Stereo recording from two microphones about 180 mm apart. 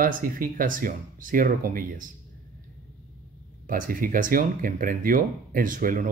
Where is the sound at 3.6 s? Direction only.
50° right (ahead or behind).